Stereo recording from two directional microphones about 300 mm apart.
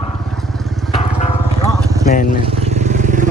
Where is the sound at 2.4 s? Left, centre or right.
Right.